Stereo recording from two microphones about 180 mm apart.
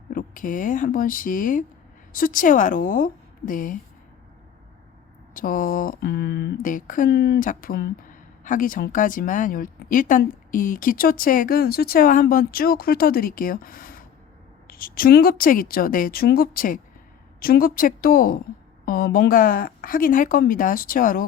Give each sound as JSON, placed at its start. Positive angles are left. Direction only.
{"t": 0.1, "sound": "speech", "side_deg": 50}
{"t": 5.3, "sound": "speech", "side_deg": 50}
{"t": 6.6, "sound": "speech", "side_deg": 45}